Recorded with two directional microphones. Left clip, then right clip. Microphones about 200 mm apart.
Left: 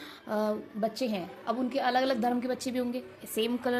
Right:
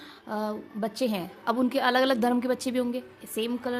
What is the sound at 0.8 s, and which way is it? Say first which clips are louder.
A woman's voice: right 5 dB; 25° right (ahead or behind).